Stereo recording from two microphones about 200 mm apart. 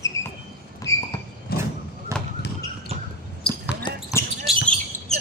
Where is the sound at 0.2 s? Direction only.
15° left (ahead or behind).